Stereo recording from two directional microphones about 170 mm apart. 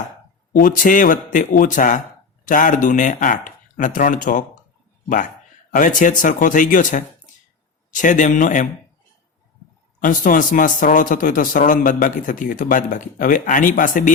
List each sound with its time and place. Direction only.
0.5 s a man's voice: 55° left (ahead or behind)
10.0 s a man's voice: 50° left (ahead or behind)